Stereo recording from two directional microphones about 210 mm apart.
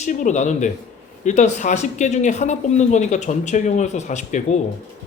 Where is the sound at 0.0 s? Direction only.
35° left (ahead or behind).